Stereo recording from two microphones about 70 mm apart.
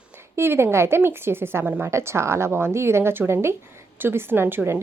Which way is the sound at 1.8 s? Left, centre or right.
Right.